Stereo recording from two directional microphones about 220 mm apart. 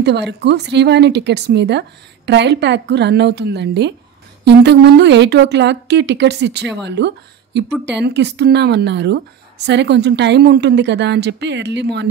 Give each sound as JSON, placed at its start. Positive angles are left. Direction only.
{"t": 0.0, "sound": "speech", "side_deg": -50}